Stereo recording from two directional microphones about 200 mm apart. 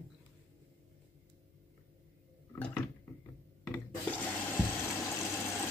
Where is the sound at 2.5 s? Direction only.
10° left (ahead or behind).